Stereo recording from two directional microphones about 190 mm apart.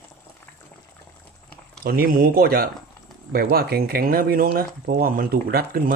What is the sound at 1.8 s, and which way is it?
Speech, 50° right (ahead or behind).